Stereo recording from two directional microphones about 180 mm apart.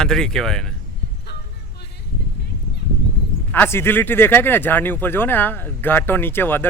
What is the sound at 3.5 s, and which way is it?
Speech, 10° left (ahead or behind).